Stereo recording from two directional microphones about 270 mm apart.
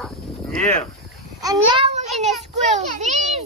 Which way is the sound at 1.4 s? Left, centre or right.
Centre.